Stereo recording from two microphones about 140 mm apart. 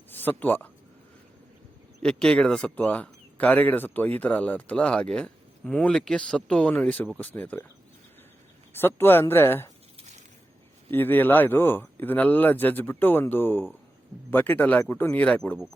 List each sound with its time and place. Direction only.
0.1 s speech: 15° left (ahead or behind)
2.0 s speech: 5° left (ahead or behind)
8.7 s speech: 15° left (ahead or behind)
10.9 s speech: 15° left (ahead or behind)